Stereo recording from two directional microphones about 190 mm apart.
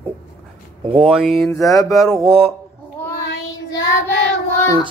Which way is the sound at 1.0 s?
Centre (ahead or behind).